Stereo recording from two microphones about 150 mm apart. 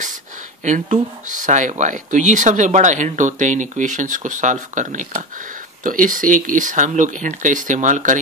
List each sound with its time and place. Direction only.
0.7 s speech: 55° right (ahead or behind)